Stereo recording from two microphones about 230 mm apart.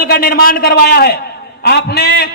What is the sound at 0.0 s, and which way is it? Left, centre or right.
A man's voice, left.